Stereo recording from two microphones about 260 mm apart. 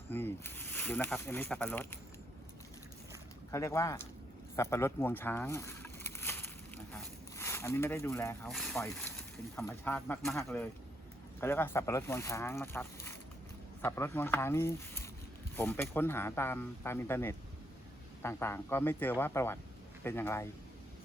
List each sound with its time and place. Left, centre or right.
0.1 s speech: centre
3.5 s speech: centre